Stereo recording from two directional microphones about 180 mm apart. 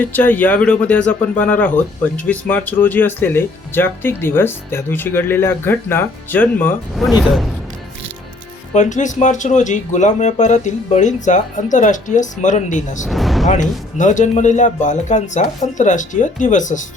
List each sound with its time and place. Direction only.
0.0 s speech: 10° left (ahead or behind)
6.9 s speech: centre (ahead or behind)
8.7 s speech: 45° left (ahead or behind)
13.1 s speech: centre (ahead or behind)
13.5 s speech: 45° left (ahead or behind)